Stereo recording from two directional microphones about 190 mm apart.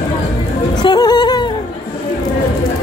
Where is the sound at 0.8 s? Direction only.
20° left (ahead or behind).